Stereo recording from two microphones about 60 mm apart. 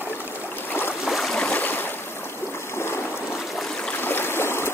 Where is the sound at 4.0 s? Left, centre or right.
Left.